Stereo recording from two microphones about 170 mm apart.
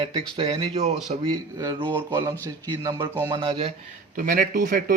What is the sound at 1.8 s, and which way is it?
Speech, 10° right (ahead or behind).